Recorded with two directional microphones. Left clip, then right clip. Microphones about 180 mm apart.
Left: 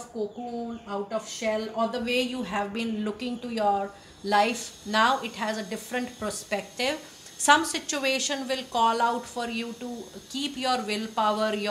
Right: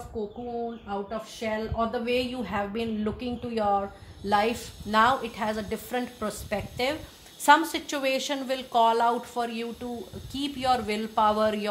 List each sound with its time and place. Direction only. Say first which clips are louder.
1.4 s a woman's voice: left 1 dB; 35° right (ahead or behind)